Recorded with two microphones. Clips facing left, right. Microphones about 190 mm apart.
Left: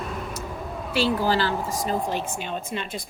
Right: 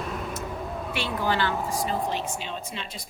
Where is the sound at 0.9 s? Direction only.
35° left (ahead or behind).